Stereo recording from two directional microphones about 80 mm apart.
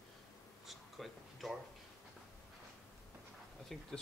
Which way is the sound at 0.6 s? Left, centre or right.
Centre.